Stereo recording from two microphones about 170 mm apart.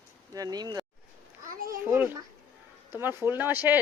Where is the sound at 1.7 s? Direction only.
15° right (ahead or behind).